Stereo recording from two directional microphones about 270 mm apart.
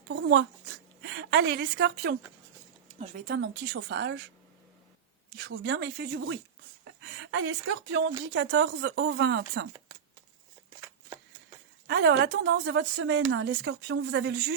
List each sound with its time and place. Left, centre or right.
0.1 s a woman's voice: right
5.5 s speech: right
11.9 s speech: right